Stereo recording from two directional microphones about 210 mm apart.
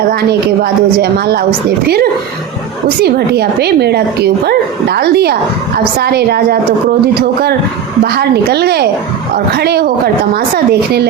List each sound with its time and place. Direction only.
0.1 s speech: 50° right (ahead or behind)
3.0 s speech: 50° right (ahead or behind)